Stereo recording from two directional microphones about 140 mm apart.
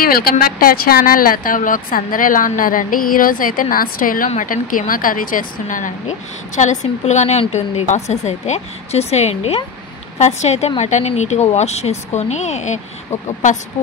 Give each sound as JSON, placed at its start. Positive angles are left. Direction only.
{"t": 0.0, "sound": "speech", "side_deg": 90}
{"t": 4.3, "sound": "a woman's voice", "side_deg": 70}